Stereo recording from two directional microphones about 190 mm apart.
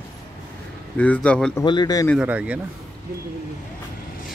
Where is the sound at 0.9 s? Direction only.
5° left (ahead or behind).